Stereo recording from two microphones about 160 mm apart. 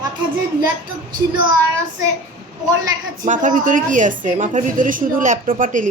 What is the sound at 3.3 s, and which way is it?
A woman's voice, 55° right (ahead or behind).